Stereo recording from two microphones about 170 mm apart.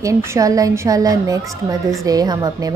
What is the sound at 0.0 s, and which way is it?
A woman's voice, 15° right (ahead or behind).